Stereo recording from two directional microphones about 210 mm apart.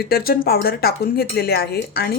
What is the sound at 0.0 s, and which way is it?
Speech, 45° left (ahead or behind).